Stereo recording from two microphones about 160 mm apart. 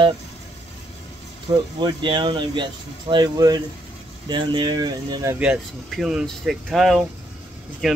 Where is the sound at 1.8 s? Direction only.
30° right (ahead or behind).